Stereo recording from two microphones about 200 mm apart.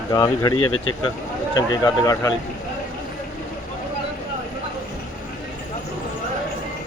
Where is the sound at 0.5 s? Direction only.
90° left.